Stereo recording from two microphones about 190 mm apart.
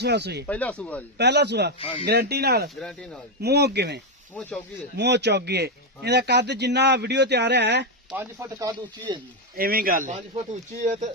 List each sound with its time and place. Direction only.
0.0 s a man's voice: 60° right (ahead or behind)
0.4 s speech: 5° left (ahead or behind)
1.2 s a man's voice: 65° right (ahead or behind)
2.7 s speech: 5° left (ahead or behind)
3.4 s a man's voice: 60° right (ahead or behind)
4.4 s speech: 10° left (ahead or behind)
4.9 s a man's voice: 60° right (ahead or behind)
8.1 s speech: 15° right (ahead or behind)
9.6 s speech: 50° right (ahead or behind)